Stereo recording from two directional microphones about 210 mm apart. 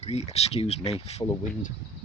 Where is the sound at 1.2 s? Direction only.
20° left (ahead or behind).